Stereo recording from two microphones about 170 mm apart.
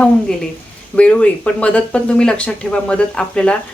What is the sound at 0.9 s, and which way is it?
Speech, 5° left (ahead or behind).